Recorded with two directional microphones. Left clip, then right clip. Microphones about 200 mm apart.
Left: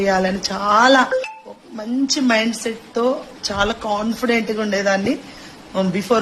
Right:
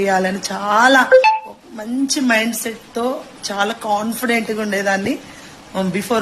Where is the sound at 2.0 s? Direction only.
15° left (ahead or behind).